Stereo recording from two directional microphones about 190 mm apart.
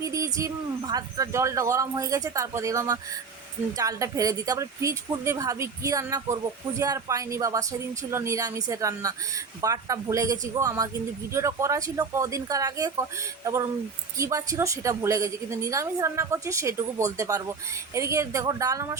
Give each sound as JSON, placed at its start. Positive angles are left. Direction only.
{"t": 0.0, "sound": "speech", "side_deg": -15}